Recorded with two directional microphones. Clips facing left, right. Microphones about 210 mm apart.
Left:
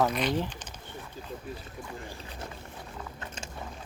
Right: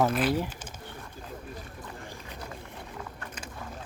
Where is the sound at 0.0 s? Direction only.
5° right (ahead or behind).